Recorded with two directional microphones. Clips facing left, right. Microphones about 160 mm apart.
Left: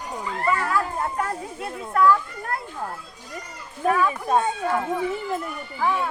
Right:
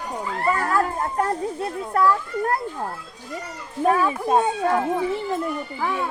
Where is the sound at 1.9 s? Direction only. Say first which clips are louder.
Left 2 dB; 35° right (ahead or behind).